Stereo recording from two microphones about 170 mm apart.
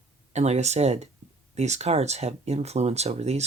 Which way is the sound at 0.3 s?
40° right (ahead or behind).